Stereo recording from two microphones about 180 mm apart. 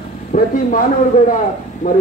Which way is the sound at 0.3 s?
50° left (ahead or behind).